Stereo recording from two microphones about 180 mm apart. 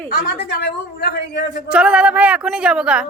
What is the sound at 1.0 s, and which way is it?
Speech, 60° left (ahead or behind).